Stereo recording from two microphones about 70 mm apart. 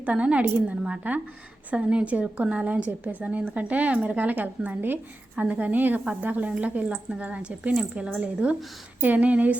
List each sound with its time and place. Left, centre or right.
0.0 s speech: centre